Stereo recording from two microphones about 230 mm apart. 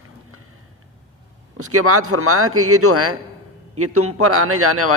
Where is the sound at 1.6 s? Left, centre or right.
Right.